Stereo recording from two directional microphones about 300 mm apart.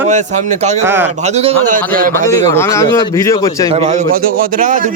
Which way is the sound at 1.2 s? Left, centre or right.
Right.